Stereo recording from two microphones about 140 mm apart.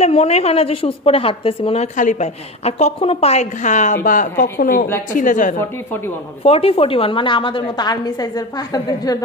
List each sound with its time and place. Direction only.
0.0 s a woman's voice: 50° left (ahead or behind)
2.0 s a woman's voice: 60° left (ahead or behind); by 4.8 s 85° left
5.1 s a woman's voice: 65° left (ahead or behind)
5.6 s speech: 15° left (ahead or behind)
6.4 s a woman's voice: 45° left (ahead or behind); by 9.2 s 25° left (ahead or behind)